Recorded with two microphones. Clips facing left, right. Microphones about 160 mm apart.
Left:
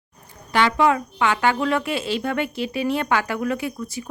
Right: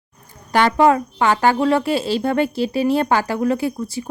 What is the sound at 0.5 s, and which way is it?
Speech, 40° right (ahead or behind).